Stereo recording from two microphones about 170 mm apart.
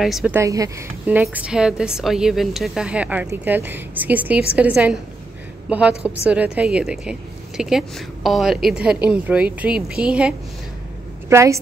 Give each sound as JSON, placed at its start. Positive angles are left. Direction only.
{"t": 0.0, "sound": "a woman's voice", "side_deg": 0}
{"t": 0.3, "sound": "a woman's voice", "side_deg": -20}
{"t": 11.2, "sound": "a woman's voice", "side_deg": -15}